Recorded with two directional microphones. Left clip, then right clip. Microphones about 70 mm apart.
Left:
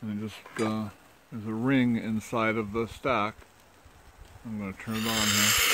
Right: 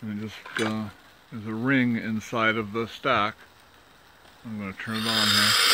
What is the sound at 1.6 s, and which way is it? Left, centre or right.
Speech, left.